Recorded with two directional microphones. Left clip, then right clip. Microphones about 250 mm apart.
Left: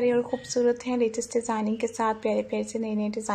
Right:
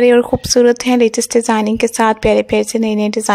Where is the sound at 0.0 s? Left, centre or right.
Right.